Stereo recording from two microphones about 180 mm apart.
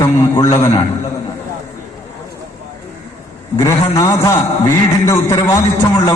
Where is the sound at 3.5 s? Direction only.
15° left (ahead or behind).